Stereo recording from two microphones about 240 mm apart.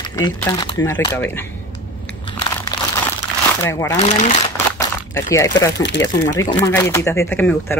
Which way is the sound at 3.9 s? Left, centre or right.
Left.